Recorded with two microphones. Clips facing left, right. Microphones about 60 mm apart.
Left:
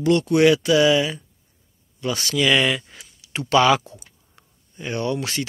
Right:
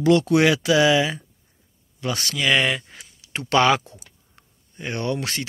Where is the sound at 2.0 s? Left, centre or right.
Right.